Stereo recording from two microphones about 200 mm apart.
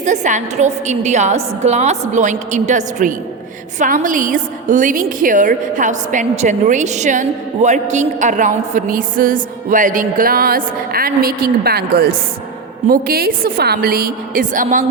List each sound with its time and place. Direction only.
0.0 s a woman's voice: 35° right (ahead or behind)